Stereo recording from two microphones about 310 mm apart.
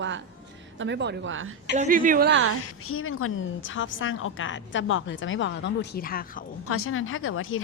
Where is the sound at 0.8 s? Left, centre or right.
Right.